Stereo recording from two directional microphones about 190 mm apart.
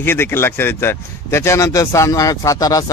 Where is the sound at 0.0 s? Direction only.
10° left (ahead or behind).